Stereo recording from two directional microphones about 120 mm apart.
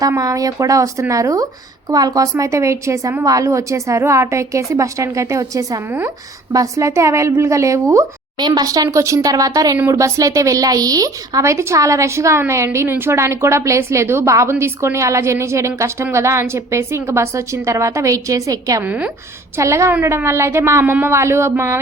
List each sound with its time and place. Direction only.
0.0 s a woman's voice: 30° right (ahead or behind)
18.8 s a woman's voice: 10° right (ahead or behind)
19.5 s speech: 25° right (ahead or behind)